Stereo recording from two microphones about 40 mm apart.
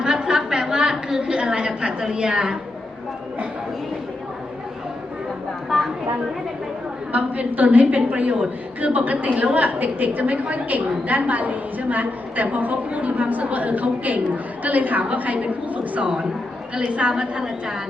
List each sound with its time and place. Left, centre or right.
0.0 s a sound: right
5.6 s a woman's voice: centre
7.1 s a woman's voice: right; by 17.7 s centre